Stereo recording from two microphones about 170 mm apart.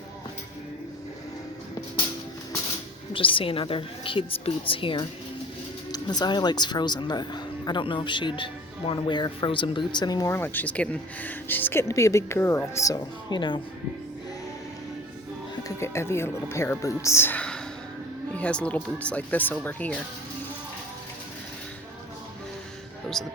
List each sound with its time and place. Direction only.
3.1 s a woman's voice: 30° left (ahead or behind)
15.8 s speech: 15° left (ahead or behind)
23.2 s speech: centre (ahead or behind)